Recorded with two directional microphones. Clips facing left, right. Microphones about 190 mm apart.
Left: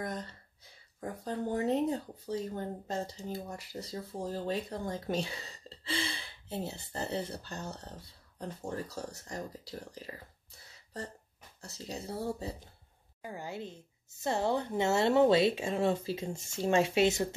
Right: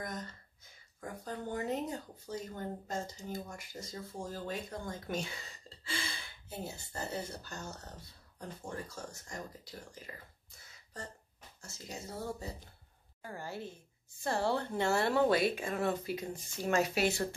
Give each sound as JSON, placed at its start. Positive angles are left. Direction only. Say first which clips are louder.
{"t": 0.0, "sound": "speech", "louder": "left 4 dB", "side_deg": 30}
{"t": 11.6, "sound": "speech", "louder": "left 5 dB", "side_deg": 35}
{"t": 13.2, "sound": "a woman's voice", "louder": "left 2 dB", "side_deg": 15}